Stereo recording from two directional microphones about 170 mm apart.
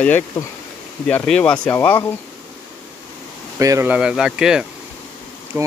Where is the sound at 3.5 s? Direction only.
15° right (ahead or behind).